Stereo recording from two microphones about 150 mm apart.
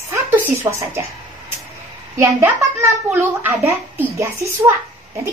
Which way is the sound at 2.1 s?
15° right (ahead or behind).